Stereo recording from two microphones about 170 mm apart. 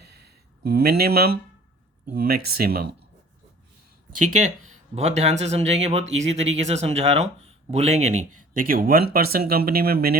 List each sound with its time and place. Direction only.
0.6 s speech: 70° right (ahead or behind)
4.1 s speech: 50° right (ahead or behind); by 10.2 s 65° right (ahead or behind)